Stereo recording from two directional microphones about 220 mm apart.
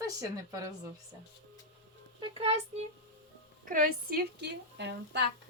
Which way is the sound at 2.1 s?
25° right (ahead or behind).